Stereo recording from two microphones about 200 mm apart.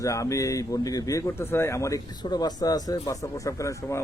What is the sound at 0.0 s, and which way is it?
Speech, 15° left (ahead or behind).